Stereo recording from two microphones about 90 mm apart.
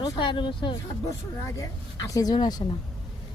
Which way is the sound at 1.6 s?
40° left (ahead or behind).